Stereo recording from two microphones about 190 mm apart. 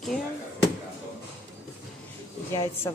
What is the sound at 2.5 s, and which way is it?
Speech, 15° left (ahead or behind).